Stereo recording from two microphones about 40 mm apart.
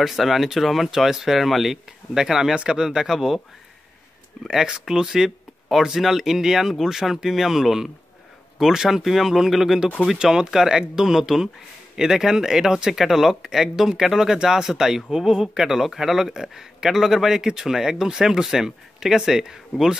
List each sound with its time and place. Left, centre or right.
0.0 s speech: centre
2.5 s speech: right
4.5 s speech: centre
10.1 s speech: centre